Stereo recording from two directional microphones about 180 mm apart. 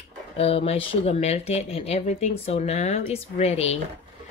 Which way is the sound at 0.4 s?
35° left (ahead or behind).